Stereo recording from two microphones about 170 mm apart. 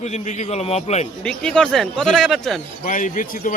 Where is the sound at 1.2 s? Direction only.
5° left (ahead or behind).